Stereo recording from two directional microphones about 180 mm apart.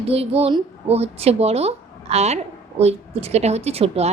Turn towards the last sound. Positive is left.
turn(degrees=-35)  # may be behind; listen again after turning